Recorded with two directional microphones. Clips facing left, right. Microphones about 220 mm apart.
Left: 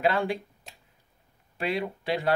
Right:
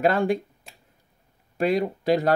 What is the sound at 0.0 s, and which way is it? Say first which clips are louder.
Speech: right 5 dB; 45° right (ahead or behind).